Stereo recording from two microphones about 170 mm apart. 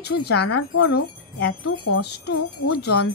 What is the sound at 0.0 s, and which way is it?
Wind chime, 75° left (ahead or behind).